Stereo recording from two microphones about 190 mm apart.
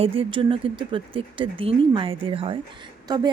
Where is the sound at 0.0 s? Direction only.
30° right (ahead or behind).